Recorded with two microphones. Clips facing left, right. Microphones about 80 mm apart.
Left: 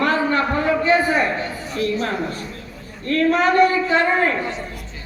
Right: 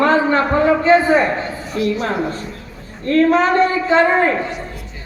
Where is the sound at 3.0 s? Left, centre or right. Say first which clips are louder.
Right 4 dB; right.